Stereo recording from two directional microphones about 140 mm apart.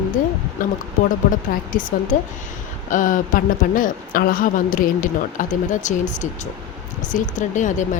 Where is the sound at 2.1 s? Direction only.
65° left (ahead or behind).